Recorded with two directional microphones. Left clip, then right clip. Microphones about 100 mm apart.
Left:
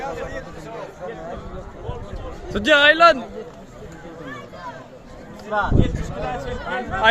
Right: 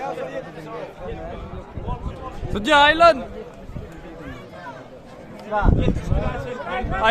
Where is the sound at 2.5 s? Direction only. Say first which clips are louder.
Left 1 dB; centre (ahead or behind).